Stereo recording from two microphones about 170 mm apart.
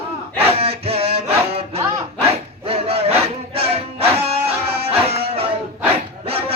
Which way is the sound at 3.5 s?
35° right (ahead or behind).